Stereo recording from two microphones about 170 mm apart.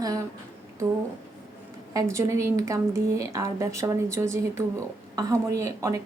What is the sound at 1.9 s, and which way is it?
A woman's voice, 20° right (ahead or behind).